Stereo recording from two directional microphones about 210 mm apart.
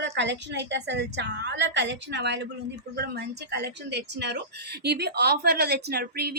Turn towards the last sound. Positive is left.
turn(degrees=-50)  # may be behind; listen again after turning